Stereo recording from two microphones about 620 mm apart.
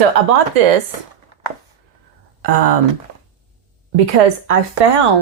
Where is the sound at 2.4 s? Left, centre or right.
Right.